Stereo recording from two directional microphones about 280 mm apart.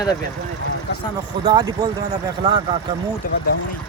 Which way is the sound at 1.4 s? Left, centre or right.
Centre.